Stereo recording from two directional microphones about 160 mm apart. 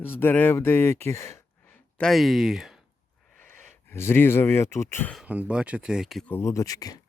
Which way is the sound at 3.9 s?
15° left (ahead or behind).